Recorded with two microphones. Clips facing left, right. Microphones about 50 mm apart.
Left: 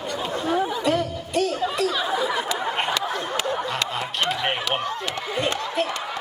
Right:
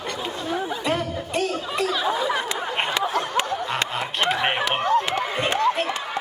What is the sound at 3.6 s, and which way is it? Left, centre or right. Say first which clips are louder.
Snicker: right 1 dB; right.